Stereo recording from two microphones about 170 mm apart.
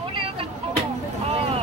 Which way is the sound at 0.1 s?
30° right (ahead or behind).